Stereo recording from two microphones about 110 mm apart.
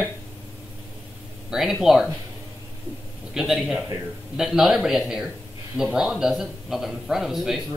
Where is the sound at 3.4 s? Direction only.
Centre (ahead or behind).